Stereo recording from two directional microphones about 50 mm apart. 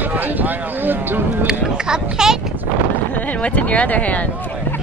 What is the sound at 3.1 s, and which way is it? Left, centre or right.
Speech, left.